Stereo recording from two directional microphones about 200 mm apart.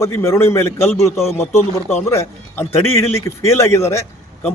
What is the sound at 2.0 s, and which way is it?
A man's voice, 15° left (ahead or behind).